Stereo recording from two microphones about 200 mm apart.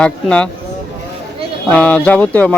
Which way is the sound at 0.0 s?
5° left (ahead or behind).